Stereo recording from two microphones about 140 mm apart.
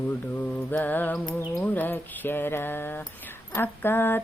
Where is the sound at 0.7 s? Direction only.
10° left (ahead or behind).